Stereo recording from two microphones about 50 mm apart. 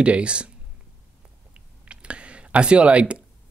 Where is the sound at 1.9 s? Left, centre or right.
Right.